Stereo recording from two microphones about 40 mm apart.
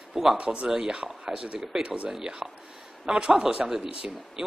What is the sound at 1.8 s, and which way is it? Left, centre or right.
Speech, right.